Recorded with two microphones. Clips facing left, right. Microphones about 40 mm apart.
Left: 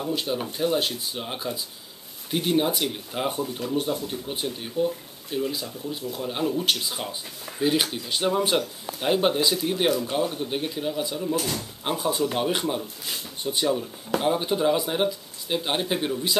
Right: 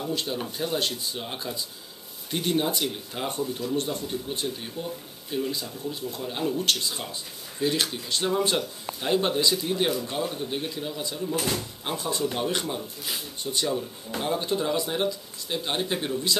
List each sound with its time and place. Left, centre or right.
0.0 s speech: centre